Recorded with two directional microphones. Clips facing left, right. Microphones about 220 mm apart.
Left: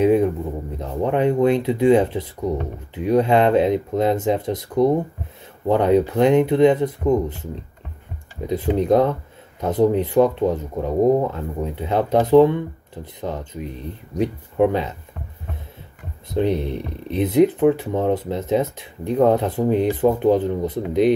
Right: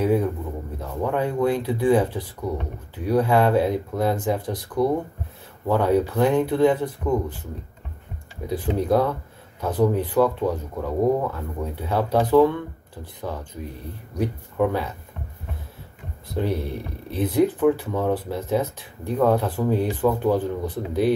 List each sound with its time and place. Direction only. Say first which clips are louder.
0.0 s a sound: left 5 dB; 20° left (ahead or behind)
0.7 s speech: left 4 dB; 20° left (ahead or behind)
8.5 s speech: left 4 dB; 20° left (ahead or behind)
16.3 s speech: left 5 dB; 20° left (ahead or behind)